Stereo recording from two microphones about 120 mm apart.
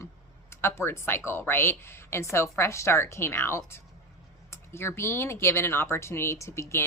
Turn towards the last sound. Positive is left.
turn(degrees=25)  # may be behind; listen again after turning